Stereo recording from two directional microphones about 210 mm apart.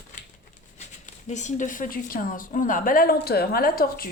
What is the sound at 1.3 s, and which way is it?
A woman's voice, 35° left (ahead or behind).